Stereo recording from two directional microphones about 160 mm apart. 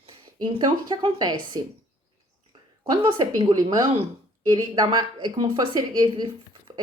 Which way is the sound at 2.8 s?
30° right (ahead or behind).